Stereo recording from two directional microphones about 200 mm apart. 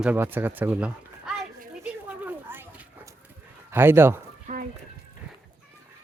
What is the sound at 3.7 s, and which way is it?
Speech, 10° right (ahead or behind).